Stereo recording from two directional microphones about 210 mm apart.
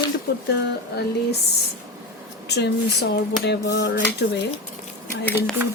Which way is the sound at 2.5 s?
55° left (ahead or behind).